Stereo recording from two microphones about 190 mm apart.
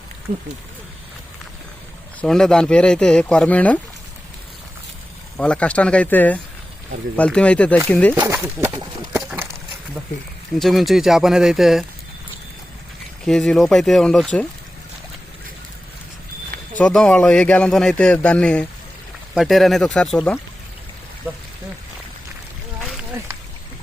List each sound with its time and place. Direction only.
2.2 s a man's voice: 5° left (ahead or behind)
5.4 s a man's voice: 5° left (ahead or behind)
8.1 s speech: 15° right (ahead or behind)
10.6 s a man's voice: centre (ahead or behind)
13.2 s a man's voice: 5° left (ahead or behind)
16.7 s a man's voice: 5° left (ahead or behind)